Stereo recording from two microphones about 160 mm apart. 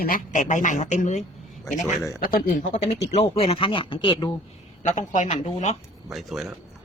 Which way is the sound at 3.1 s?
40° left (ahead or behind).